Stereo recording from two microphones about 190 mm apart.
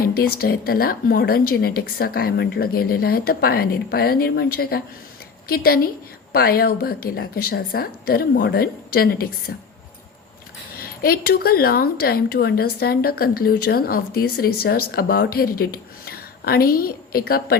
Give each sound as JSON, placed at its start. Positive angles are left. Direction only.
{"t": 0.0, "sound": "speech", "side_deg": 50}
{"t": 10.8, "sound": "speech", "side_deg": 50}